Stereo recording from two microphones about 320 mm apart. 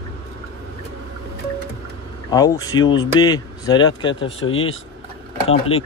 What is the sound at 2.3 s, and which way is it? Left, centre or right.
Speech, centre.